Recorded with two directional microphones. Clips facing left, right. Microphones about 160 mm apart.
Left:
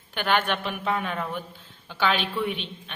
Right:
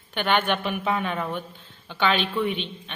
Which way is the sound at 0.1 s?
Centre (ahead or behind).